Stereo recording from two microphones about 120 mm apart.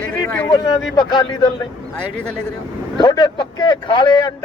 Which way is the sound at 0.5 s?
35° left (ahead or behind).